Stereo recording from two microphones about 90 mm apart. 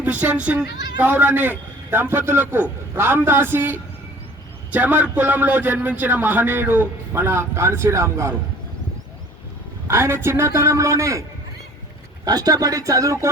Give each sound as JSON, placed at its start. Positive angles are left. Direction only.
{"t": 0.0, "sound": "a man's voice", "side_deg": -20}
{"t": 9.8, "sound": "a man's voice", "side_deg": -30}
{"t": 12.2, "sound": "a man's voice", "side_deg": -45}